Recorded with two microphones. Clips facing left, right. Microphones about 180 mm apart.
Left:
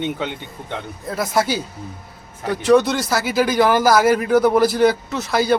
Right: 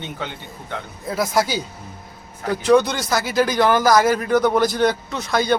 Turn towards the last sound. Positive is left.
turn(degrees=5)  # may be behind; listen again after turning